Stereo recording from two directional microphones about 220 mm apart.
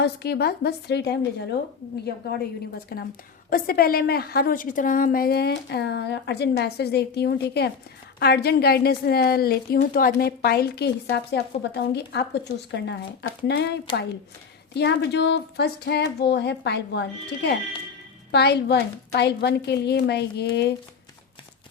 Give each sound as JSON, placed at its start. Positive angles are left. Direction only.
{"t": 0.0, "sound": "a woman's voice", "side_deg": 45}